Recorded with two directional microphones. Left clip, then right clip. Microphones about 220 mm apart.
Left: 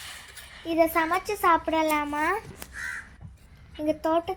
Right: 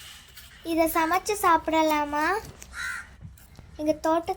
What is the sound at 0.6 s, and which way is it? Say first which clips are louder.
A child's voice: left 1 dB; centre (ahead or behind).